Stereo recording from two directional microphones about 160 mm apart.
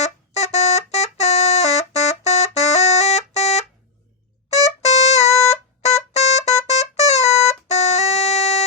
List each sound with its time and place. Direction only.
0.0 s music: 45° left (ahead or behind)